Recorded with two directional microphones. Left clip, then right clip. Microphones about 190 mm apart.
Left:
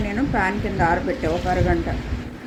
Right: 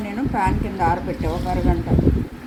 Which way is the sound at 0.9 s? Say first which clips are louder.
Left 2 dB; 15° left (ahead or behind).